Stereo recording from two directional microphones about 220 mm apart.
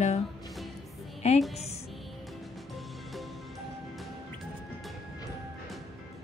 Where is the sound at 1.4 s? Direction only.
Centre (ahead or behind).